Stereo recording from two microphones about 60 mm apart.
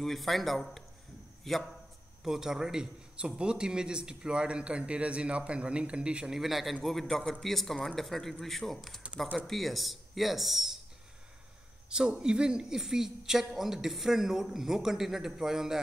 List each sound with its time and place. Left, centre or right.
0.0 s a man's voice: centre
2.2 s a man's voice: centre
6.3 s a man's voice: centre
11.9 s a man's voice: centre